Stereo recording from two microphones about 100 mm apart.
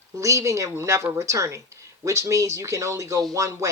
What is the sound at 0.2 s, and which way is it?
Speech, 30° right (ahead or behind).